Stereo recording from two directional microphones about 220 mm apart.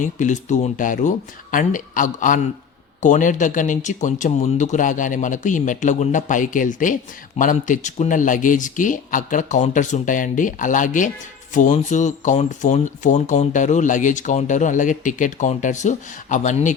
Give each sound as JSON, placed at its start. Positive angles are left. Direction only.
{"t": 0.0, "sound": "speech", "side_deg": 35}